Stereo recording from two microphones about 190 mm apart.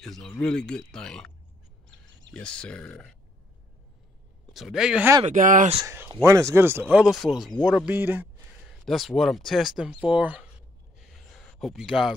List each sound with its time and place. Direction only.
0.0 s speech: 5° left (ahead or behind)
2.3 s speech: 5° left (ahead or behind)
4.6 s speech: centre (ahead or behind)
5.2 s speech: 45° right (ahead or behind)
5.8 s speech: 20° right (ahead or behind)
11.1 s a sound: centre (ahead or behind)